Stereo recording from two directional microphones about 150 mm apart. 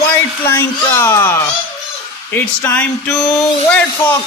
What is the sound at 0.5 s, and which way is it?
A child's voice, 20° left (ahead or behind).